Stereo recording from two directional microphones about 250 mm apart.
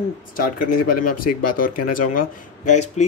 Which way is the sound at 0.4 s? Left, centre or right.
Left.